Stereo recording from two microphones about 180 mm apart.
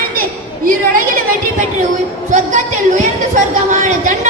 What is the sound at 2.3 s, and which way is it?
A woman's voice, 45° right (ahead or behind).